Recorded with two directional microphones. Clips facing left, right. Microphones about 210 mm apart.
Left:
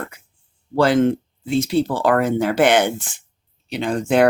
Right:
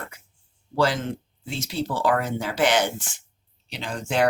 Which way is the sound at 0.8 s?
55° left (ahead or behind).